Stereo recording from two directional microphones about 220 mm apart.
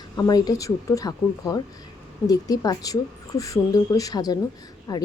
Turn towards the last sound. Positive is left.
turn(degrees=20)  # may be behind; listen again after turning